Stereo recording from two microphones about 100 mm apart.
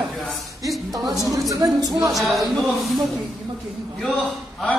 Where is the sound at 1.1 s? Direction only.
35° right (ahead or behind).